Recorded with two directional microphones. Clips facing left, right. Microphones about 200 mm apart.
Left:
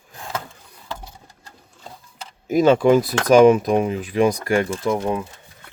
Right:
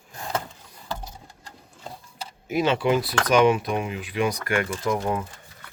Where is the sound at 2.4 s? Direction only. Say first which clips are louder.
Left 8 dB; 40° left (ahead or behind); by 5.2 s 20° left (ahead or behind).